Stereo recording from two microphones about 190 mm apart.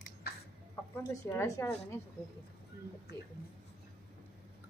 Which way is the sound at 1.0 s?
15° left (ahead or behind).